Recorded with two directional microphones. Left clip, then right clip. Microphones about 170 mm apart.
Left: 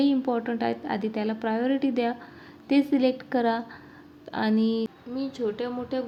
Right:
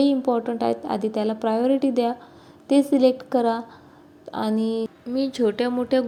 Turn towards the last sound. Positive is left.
turn(degrees=-35)  # may be behind; listen again after turning